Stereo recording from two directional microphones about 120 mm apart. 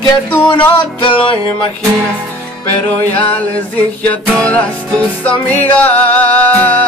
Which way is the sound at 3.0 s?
15° left (ahead or behind).